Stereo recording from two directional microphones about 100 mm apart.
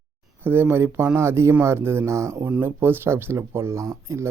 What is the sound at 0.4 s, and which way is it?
Speech, 20° right (ahead or behind).